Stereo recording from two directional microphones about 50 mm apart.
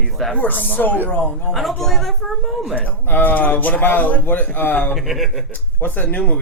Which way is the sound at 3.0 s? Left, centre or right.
Left.